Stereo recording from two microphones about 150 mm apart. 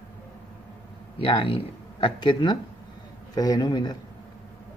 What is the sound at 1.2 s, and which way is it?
A man's voice, 35° left (ahead or behind).